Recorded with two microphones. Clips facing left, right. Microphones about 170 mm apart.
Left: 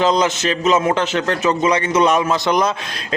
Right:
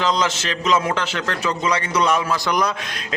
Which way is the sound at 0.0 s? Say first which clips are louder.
Left 5 dB; 20° left (ahead or behind).